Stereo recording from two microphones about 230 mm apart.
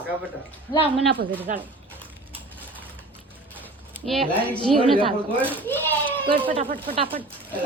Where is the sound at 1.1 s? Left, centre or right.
Right.